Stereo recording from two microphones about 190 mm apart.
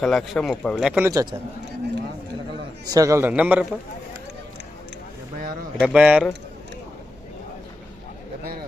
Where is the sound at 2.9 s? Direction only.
15° right (ahead or behind).